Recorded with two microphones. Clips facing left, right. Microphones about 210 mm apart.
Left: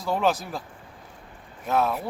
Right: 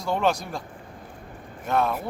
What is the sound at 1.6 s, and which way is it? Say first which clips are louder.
Speech: even; centre (ahead or behind).